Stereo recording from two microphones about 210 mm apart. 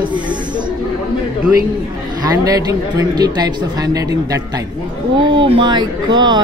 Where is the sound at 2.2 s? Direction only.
15° right (ahead or behind).